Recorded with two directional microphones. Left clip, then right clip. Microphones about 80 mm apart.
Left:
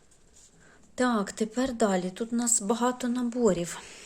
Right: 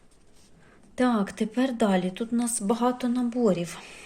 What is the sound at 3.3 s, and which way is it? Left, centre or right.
Speech, left.